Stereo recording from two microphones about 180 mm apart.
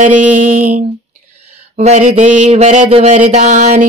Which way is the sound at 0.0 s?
45° right (ahead or behind).